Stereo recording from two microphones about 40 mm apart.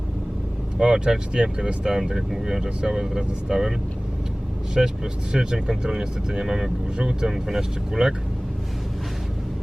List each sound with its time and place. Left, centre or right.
0.8 s speech: centre
4.8 s speech: centre